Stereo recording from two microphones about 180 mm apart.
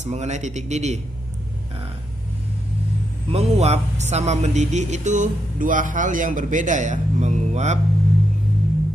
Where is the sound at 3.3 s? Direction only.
35° right (ahead or behind).